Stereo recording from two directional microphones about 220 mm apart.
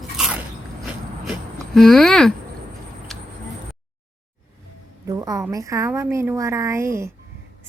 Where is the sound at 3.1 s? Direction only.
Centre (ahead or behind).